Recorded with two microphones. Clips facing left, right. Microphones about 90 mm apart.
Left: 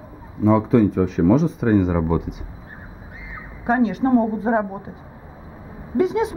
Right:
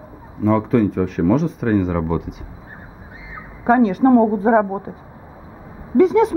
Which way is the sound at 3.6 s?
45° right (ahead or behind).